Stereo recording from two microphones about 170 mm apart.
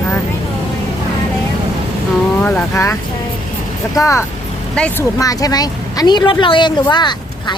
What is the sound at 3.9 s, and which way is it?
Speech, 15° left (ahead or behind).